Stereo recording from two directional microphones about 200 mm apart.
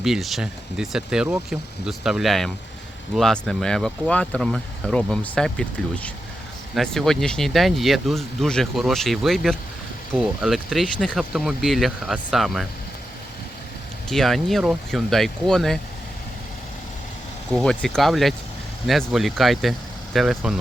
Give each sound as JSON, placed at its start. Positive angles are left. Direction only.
{"t": 0.0, "sound": "speech", "side_deg": 0}
{"t": 14.1, "sound": "speech", "side_deg": 0}
{"t": 17.5, "sound": "speech", "side_deg": 5}